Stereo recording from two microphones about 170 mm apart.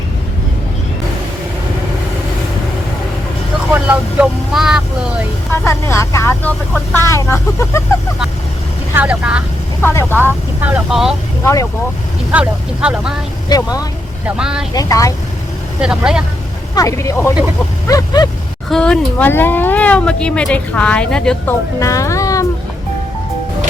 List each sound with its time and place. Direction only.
3.7 s vehicle: 10° right (ahead or behind)
5.5 s speech: 15° left (ahead or behind)
9.0 s speech: 5° right (ahead or behind)
9.8 s speech: 15° left (ahead or behind)
10.6 s speech: 5° right (ahead or behind)
11.4 s speech: 20° left (ahead or behind)
12.3 s speech: 5° right (ahead or behind)
13.5 s speech: 20° left (ahead or behind)
14.3 s speech: 5° right (ahead or behind)
14.7 s speech: 20° left (ahead or behind)
15.8 s speech: 5° right (ahead or behind)
16.7 s speech: 20° left (ahead or behind)
18.7 s speech: 5° left (ahead or behind)
21.8 s speech: 20° left (ahead or behind)